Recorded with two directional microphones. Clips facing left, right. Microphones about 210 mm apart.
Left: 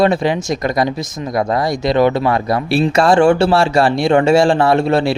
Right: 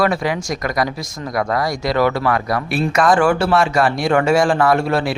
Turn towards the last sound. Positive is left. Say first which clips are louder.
# left 3 dB
turn(degrees=25)  # may be behind; listen again after turning